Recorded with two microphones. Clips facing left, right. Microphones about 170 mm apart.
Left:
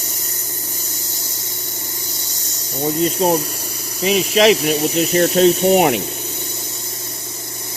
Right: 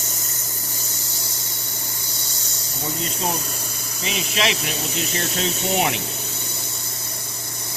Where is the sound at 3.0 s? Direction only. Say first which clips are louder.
Left 11 dB; 40° left (ahead or behind).